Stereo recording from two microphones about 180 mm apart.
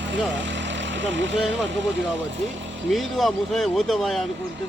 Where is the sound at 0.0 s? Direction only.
85° right.